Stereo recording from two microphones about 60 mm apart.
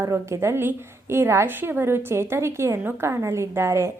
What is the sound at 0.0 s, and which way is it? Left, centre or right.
A woman's voice, right.